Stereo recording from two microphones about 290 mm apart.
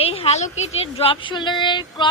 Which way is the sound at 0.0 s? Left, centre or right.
Centre.